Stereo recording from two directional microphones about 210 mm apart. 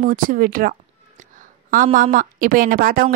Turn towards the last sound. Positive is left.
turn(degrees=-40)  # may be behind; listen again after turning